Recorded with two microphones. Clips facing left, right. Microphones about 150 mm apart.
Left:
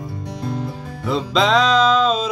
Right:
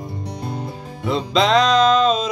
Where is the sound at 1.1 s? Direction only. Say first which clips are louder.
Even; centre (ahead or behind).